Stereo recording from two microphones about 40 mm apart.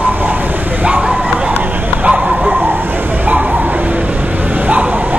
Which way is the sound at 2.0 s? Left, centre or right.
Right.